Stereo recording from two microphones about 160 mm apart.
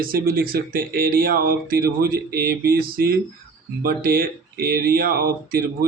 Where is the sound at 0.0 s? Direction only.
65° right (ahead or behind).